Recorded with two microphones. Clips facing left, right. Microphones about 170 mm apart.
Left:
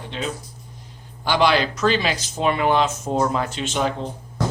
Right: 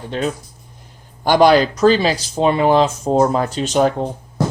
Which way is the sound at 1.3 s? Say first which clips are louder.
Right 7 dB; 45° right (ahead or behind).